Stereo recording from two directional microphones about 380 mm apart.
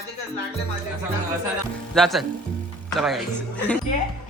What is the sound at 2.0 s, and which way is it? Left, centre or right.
A man's voice, centre.